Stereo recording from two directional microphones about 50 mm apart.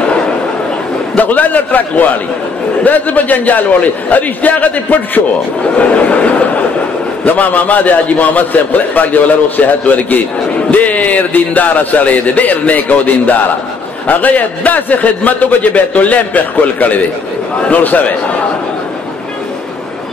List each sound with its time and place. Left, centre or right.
1.1 s a man's voice: left
5.6 s a sound: left
7.2 s a man's voice: left